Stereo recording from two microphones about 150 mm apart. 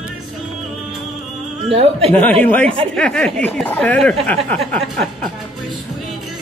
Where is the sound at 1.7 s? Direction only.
40° right (ahead or behind).